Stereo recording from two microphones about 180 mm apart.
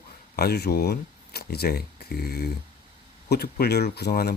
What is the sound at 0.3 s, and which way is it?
Speech, 60° left (ahead or behind).